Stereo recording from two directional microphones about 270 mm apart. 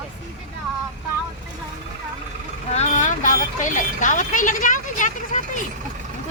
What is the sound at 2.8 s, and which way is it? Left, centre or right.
Speech, left.